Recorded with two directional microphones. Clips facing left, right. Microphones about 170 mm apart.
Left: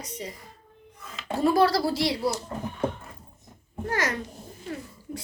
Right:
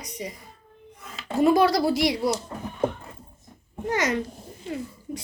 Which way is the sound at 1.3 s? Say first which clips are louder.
Right 3 dB; 20° right (ahead or behind).